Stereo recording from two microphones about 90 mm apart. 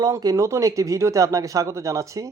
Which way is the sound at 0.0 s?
45° right (ahead or behind).